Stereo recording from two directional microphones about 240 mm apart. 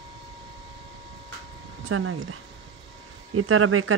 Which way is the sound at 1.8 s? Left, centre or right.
Right.